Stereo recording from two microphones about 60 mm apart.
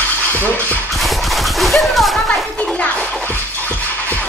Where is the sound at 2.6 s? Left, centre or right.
Centre.